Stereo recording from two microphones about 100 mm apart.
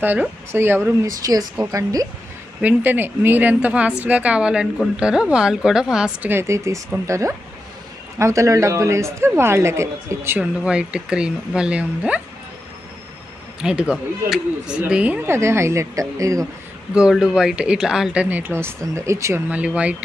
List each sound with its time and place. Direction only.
0.0 s speech: 20° right (ahead or behind)
1.2 s a woman's voice: 40° right (ahead or behind)
2.6 s speech: 15° right (ahead or behind)
6.2 s a woman's voice: 25° right (ahead or behind)
10.4 s speech: 10° right (ahead or behind)
13.6 s speech: 10° right (ahead or behind)
15.2 s speech: 25° right (ahead or behind)
16.9 s speech: 10° right (ahead or behind); by 19.4 s 30° right (ahead or behind)
19.5 s speech: 15° right (ahead or behind)